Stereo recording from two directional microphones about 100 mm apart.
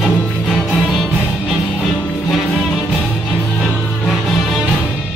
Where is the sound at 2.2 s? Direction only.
Centre (ahead or behind).